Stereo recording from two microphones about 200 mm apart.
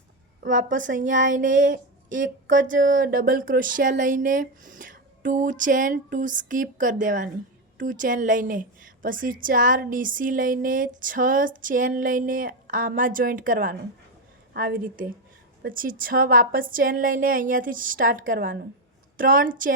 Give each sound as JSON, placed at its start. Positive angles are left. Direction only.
{"t": 0.4, "sound": "a woman's voice", "side_deg": -40}
{"t": 15.6, "sound": "a woman's voice", "side_deg": -45}